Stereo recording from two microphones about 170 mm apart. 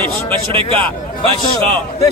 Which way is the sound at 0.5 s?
30° right (ahead or behind).